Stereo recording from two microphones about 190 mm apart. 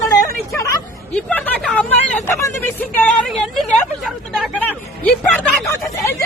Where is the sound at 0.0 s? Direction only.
15° left (ahead or behind).